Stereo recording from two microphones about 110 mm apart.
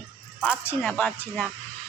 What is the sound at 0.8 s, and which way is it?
Speech, 5° left (ahead or behind).